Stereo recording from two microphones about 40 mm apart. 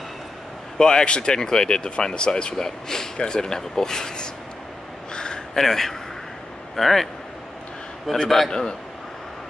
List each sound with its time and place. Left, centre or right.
0.7 s speech: centre
5.1 s a sound: left
5.5 s speech: centre
8.1 s a man's voice: centre
8.5 s a man's voice: left